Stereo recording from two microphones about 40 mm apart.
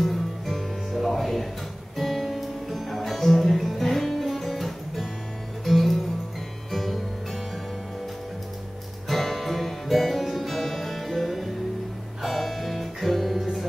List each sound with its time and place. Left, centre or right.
0.0 s music: centre
9.1 s music: centre